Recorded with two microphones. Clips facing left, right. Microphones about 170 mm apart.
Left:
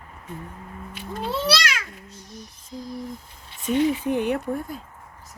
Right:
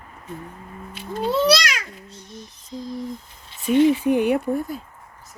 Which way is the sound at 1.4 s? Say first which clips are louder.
Right 5 dB; 15° right (ahead or behind).